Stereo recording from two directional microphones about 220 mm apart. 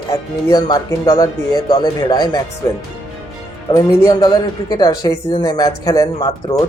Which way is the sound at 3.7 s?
20° left (ahead or behind).